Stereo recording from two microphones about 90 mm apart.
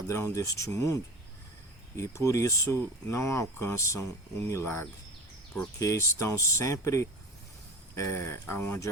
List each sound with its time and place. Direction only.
0.1 s speech: 35° left (ahead or behind)
2.0 s speech: 35° left (ahead or behind)